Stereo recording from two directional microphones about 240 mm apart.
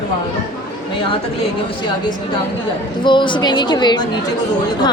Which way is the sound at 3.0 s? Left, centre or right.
Centre.